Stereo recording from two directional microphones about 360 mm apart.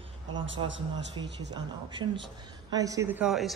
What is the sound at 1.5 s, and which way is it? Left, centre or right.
A woman's voice, centre.